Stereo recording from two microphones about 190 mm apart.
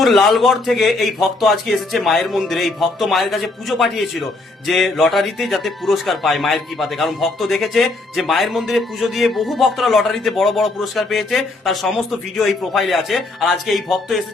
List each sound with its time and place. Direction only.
0.0 s speech: centre (ahead or behind)